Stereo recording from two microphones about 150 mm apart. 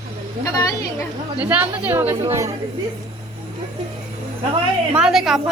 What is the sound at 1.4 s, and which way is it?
Speech, 10° right (ahead or behind).